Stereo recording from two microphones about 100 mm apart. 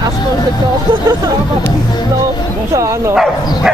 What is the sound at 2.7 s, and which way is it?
Speech, 30° right (ahead or behind).